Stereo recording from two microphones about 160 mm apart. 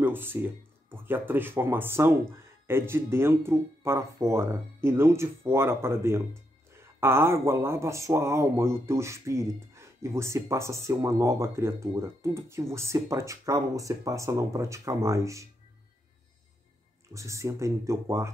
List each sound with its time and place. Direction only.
0.0 s speech: 15° right (ahead or behind)
17.1 s speech: 20° right (ahead or behind)